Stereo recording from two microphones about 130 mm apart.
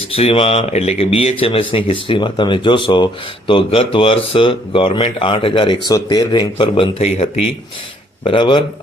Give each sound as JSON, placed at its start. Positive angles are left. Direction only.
{"t": 0.1, "sound": "speech", "side_deg": 50}